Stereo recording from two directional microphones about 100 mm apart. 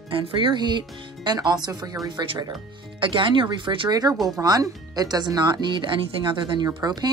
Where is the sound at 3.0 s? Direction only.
55° right (ahead or behind).